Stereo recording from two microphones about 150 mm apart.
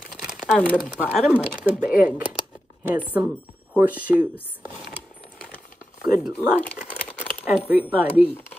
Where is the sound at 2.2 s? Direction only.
10° right (ahead or behind).